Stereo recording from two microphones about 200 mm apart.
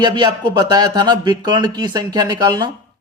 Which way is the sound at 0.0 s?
20° right (ahead or behind).